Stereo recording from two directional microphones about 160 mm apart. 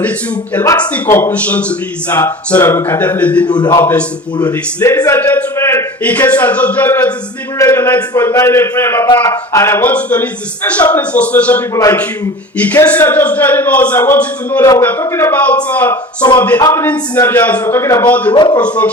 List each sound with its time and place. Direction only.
0.5 s a man's voice: 20° left (ahead or behind)
3.5 s a man's voice: 25° left (ahead or behind); by 11.6 s 10° left (ahead or behind)
11.7 s a man's voice: 20° left (ahead or behind)
12.5 s speech: 10° left (ahead or behind)
16.6 s a man's voice: 25° left (ahead or behind)
16.8 s speech: 10° left (ahead or behind)